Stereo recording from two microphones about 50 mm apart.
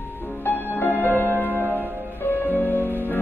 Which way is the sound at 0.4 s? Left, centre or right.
Left.